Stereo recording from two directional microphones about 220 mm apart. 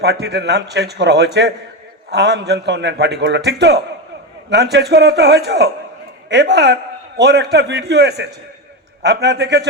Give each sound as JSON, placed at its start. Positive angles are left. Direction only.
{"t": 0.0, "sound": "a man's voice", "side_deg": -50}